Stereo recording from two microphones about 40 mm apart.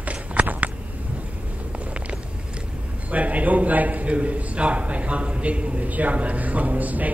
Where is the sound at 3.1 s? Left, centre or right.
Right.